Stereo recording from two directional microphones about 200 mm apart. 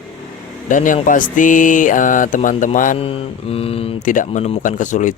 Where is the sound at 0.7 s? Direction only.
40° left (ahead or behind).